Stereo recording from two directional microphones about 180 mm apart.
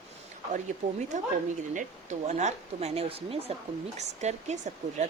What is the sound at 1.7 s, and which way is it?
Speech, 40° right (ahead or behind).